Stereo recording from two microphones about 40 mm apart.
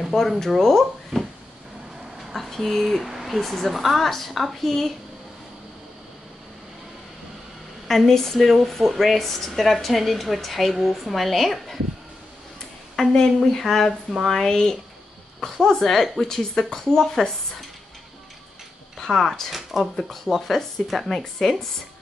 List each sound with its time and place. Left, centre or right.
0.2 s a woman's voice: centre
2.3 s speech: centre
3.1 s a sound: centre
3.3 s speech: centre
7.9 s speech: centre
12.9 s a woman's voice: centre
18.9 s speech: centre
19.5 s speech: centre